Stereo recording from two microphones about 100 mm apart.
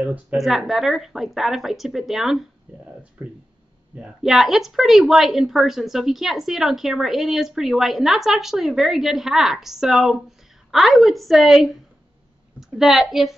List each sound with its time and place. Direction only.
0.0 s speech: 15° right (ahead or behind)
0.4 s speech: centre (ahead or behind)
2.7 s a sound: 10° right (ahead or behind)
3.2 s speech: 20° right (ahead or behind)
3.9 s a woman's voice: 5° right (ahead or behind)